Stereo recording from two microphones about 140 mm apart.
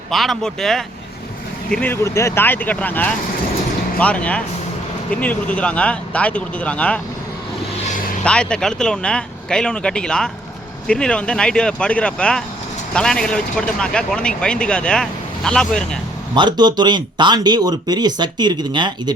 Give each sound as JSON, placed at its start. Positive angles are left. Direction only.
{"t": 0.1, "sound": "speech", "side_deg": 0}
{"t": 1.7, "sound": "speech", "side_deg": 15}
{"t": 8.2, "sound": "speech", "side_deg": 5}
{"t": 16.3, "sound": "speech", "side_deg": -30}